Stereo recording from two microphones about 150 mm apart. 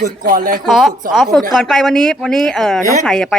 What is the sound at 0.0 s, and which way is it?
Speech, 65° right (ahead or behind).